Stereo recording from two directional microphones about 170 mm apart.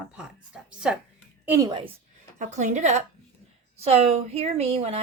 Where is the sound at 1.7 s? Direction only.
30° right (ahead or behind).